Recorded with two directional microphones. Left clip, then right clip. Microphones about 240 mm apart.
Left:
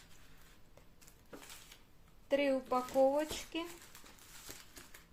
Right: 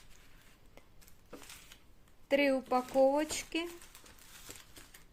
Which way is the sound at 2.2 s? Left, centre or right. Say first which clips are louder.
Right 3 dB; right.